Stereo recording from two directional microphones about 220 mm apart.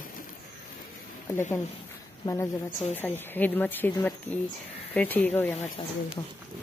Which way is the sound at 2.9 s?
10° left (ahead or behind).